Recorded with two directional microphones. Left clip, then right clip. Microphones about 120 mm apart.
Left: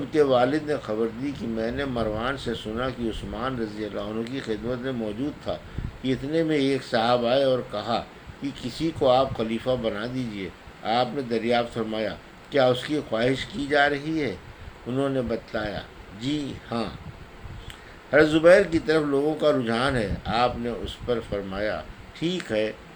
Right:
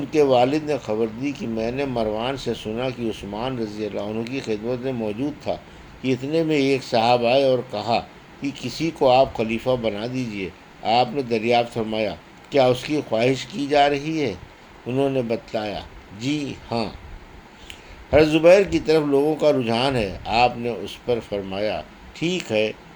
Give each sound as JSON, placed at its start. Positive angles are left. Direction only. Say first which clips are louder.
{"t": 0.1, "sound": "speech", "louder": "right 3 dB", "side_deg": -40}
{"t": 18.1, "sound": "speech", "louder": "right 2 dB", "side_deg": -35}